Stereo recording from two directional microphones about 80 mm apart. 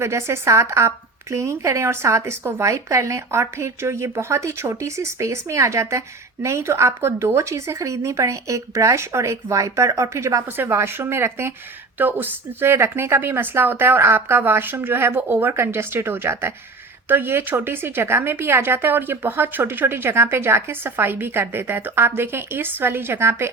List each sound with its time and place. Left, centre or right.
0.0 s a woman's voice: right